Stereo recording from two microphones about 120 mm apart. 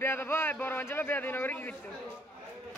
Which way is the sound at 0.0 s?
20° left (ahead or behind).